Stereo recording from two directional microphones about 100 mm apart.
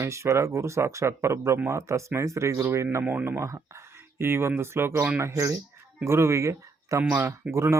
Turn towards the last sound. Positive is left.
turn(degrees=-30)  # may be behind; listen again after turning